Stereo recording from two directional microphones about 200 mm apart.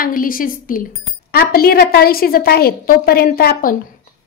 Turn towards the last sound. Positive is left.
turn(degrees=50)  # may be behind; listen again after turning